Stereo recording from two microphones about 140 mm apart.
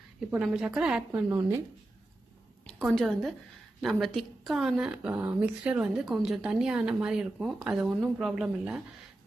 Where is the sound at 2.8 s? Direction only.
Centre (ahead or behind).